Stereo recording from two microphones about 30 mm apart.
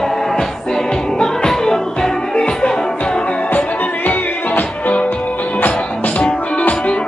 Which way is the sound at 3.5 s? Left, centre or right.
Left.